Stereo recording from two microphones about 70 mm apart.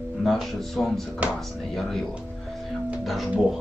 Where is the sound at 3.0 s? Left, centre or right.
Centre.